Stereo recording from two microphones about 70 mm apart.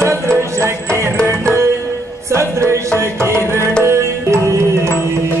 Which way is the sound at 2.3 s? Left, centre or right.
Right.